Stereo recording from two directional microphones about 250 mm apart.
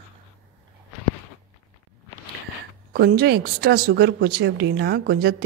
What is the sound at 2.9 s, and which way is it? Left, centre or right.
Speech, right.